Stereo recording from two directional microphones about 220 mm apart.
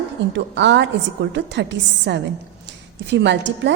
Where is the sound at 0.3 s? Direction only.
55° right (ahead or behind).